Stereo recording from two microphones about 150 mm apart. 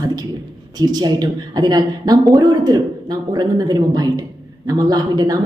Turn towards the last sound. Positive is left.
turn(degrees=-25)  # may be behind; listen again after turning